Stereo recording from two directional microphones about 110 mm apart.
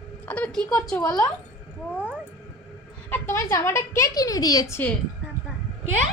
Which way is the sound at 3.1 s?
20° left (ahead or behind).